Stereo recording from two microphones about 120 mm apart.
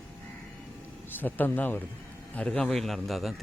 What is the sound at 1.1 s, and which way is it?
A man's voice, 15° left (ahead or behind).